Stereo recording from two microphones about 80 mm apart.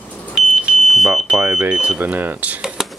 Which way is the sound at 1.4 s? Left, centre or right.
Centre.